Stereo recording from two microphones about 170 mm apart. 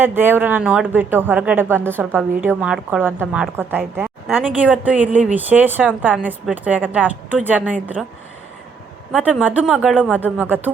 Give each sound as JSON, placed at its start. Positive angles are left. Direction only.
{"t": 0.0, "sound": "speech", "side_deg": -10}
{"t": 9.4, "sound": "speech", "side_deg": -10}